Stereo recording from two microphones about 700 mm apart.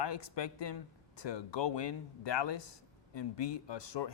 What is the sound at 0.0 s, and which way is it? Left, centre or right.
Speech, left.